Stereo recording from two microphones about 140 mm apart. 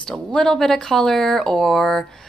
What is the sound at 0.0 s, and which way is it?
Speech, 5° left (ahead or behind).